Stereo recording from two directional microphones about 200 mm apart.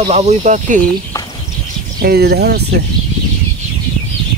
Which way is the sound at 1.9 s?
50° right (ahead or behind).